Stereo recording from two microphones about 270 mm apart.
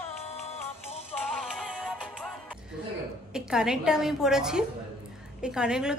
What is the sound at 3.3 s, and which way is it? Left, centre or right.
A woman's voice, centre.